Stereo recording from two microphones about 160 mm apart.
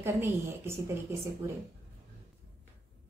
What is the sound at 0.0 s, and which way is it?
Speech, 15° right (ahead or behind).